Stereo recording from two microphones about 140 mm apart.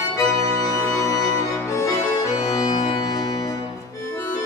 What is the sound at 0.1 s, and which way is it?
Music, 25° left (ahead or behind).